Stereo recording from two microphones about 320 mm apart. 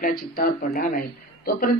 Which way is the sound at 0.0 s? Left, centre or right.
Left.